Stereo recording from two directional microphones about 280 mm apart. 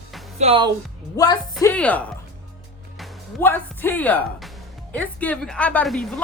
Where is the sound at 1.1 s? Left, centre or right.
Centre.